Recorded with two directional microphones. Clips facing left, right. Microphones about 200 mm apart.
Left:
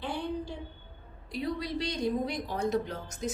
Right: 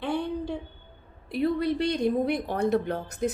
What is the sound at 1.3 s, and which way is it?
A woman's voice, 60° right (ahead or behind).